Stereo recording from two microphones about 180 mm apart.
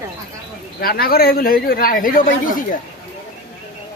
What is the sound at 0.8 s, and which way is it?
Speech, 55° left (ahead or behind).